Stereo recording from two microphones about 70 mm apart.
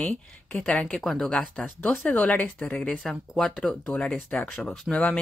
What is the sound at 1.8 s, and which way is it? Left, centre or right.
Speech, left.